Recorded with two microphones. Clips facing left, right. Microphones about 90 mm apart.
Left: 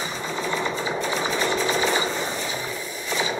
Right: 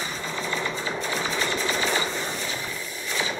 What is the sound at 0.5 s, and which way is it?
Sewing machine, 15° left (ahead or behind).